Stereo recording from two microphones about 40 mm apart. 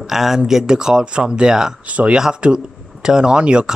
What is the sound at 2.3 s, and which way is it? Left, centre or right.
Speech, right.